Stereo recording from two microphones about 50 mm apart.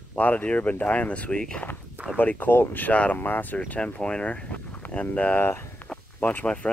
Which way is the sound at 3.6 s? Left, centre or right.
Left.